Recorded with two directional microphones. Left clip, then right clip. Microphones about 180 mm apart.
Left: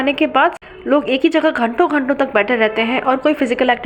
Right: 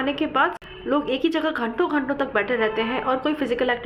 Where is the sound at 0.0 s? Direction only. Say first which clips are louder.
Left 7 dB; 20° left (ahead or behind).